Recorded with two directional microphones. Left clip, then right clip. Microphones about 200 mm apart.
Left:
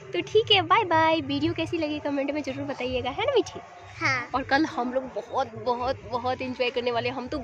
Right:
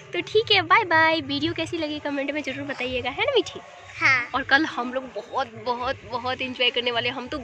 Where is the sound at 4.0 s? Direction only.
10° left (ahead or behind).